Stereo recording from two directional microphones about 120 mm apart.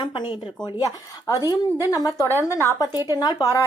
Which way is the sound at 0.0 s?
40° left (ahead or behind).